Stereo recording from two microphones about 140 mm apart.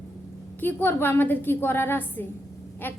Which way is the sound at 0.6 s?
15° left (ahead or behind).